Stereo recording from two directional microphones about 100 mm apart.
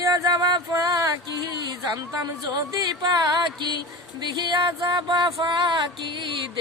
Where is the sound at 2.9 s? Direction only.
45° right (ahead or behind).